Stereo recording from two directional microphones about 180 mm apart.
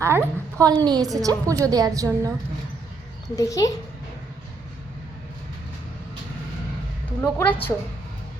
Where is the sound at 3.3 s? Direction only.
20° left (ahead or behind).